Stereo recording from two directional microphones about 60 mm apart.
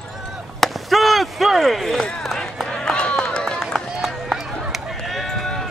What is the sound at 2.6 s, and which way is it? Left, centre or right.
Run, centre.